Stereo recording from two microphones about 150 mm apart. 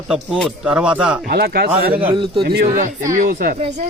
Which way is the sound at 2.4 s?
85° right.